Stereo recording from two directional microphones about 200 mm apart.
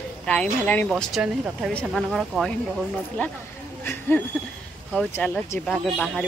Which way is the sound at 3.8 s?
10° left (ahead or behind).